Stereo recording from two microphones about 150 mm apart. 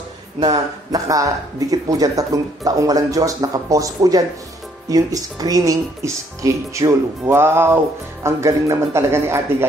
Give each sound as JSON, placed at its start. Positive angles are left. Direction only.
{"t": 0.4, "sound": "speech", "side_deg": -25}